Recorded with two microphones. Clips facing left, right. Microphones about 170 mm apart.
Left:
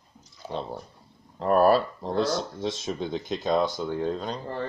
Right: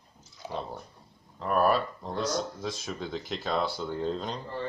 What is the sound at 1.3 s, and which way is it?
Speech, 35° left (ahead or behind).